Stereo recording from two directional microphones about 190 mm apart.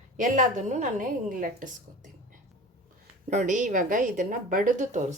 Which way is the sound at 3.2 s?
40° right (ahead or behind).